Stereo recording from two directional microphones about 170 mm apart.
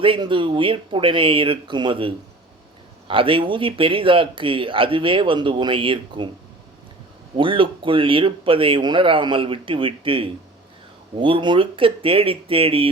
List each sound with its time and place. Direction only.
0.0 s speech: 30° right (ahead or behind)
7.3 s speech: 30° right (ahead or behind)